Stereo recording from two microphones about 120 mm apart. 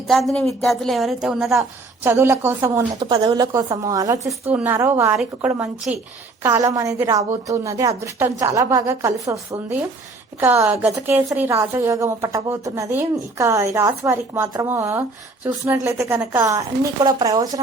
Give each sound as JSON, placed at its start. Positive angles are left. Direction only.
{"t": 0.1, "sound": "a woman's voice", "side_deg": 0}
{"t": 2.0, "sound": "a woman's voice", "side_deg": -20}
{"t": 3.0, "sound": "a woman's voice", "side_deg": -35}
{"t": 6.4, "sound": "a woman's voice", "side_deg": -25}